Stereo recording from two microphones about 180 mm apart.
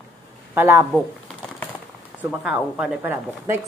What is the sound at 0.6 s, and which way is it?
Speech, 15° right (ahead or behind).